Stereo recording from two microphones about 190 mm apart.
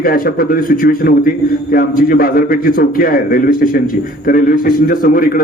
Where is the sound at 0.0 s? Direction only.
50° left (ahead or behind).